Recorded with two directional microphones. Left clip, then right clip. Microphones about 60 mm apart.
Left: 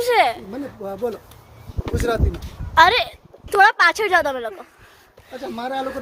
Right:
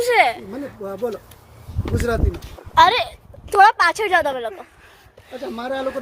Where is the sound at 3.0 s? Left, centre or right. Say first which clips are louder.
Even; left.